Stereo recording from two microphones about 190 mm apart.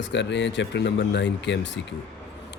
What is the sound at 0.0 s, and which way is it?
Speech, 65° left (ahead or behind).